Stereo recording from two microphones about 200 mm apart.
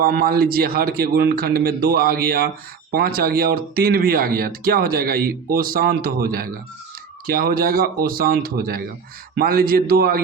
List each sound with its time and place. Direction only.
0.0 s speech: 45° right (ahead or behind)